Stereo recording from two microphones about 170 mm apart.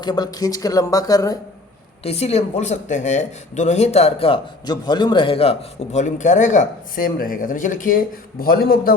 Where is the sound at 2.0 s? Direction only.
40° left (ahead or behind).